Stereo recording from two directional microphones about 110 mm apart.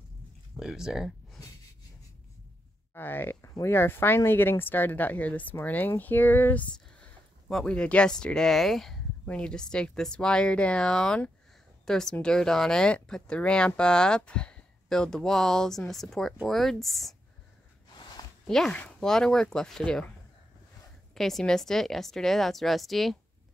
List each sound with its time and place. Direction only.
0.6 s speech: 5° right (ahead or behind)
2.9 s speech: 20° left (ahead or behind); by 17.1 s centre (ahead or behind)
18.5 s speech: 5° left (ahead or behind)
21.1 s speech: 5° left (ahead or behind)